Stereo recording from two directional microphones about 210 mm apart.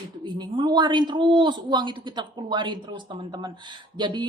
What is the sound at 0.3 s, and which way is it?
A man's voice, 20° right (ahead or behind).